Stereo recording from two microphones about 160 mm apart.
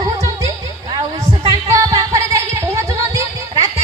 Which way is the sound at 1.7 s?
20° right (ahead or behind).